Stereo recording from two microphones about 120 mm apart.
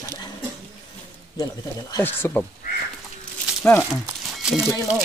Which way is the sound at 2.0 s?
15° left (ahead or behind).